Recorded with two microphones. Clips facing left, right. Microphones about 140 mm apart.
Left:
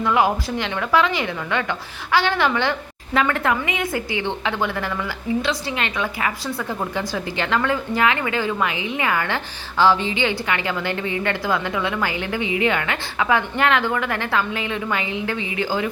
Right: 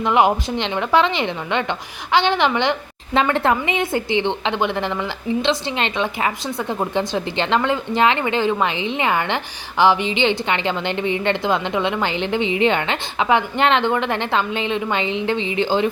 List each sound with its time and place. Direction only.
0.0 s a woman's voice: 20° right (ahead or behind)